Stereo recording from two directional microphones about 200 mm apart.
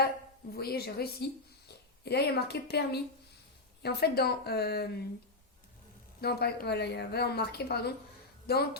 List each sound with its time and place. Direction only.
0.5 s a woman's voice: 50° left (ahead or behind)
6.2 s a woman's voice: 50° left (ahead or behind)